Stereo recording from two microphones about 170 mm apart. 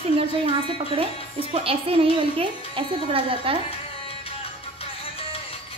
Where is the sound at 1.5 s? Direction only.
35° right (ahead or behind).